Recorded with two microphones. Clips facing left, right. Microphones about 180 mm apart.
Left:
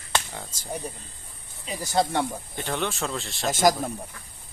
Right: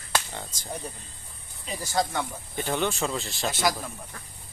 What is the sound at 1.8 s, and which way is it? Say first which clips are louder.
Speech: left 4 dB; 25° left (ahead or behind).